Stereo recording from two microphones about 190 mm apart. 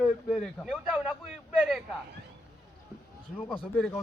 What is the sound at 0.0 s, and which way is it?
Speech, 5° right (ahead or behind).